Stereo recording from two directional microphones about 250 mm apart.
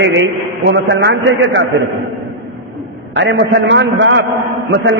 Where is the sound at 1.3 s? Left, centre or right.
Right.